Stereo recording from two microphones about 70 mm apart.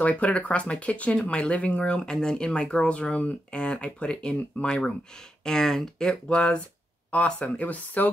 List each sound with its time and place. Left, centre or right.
0.0 s speech: centre